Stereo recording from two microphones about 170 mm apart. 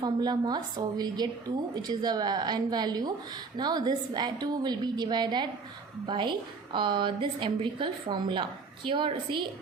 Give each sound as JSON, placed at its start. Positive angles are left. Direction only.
{"t": 0.0, "sound": "a woman's voice", "side_deg": -25}